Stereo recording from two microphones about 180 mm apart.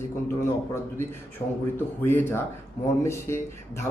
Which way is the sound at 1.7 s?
10° left (ahead or behind).